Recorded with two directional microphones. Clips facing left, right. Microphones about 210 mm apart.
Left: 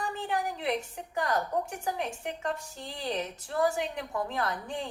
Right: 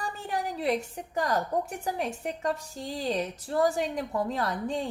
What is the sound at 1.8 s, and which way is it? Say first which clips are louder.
A woman's voice: right 2 dB; 40° right (ahead or behind).